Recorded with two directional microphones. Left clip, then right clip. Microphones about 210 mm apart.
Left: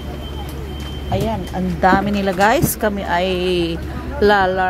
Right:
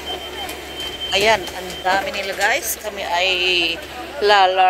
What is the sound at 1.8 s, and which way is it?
Speech, 25° left (ahead or behind).